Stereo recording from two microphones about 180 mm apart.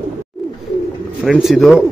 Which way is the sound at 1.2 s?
Centre (ahead or behind).